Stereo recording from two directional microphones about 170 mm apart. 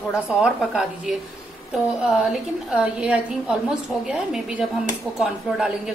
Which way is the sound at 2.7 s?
5° right (ahead or behind).